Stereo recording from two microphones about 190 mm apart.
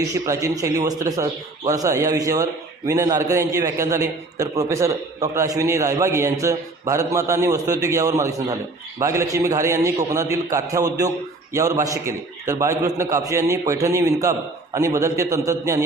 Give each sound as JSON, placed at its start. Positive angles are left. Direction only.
{"t": 0.0, "sound": "speech", "side_deg": -15}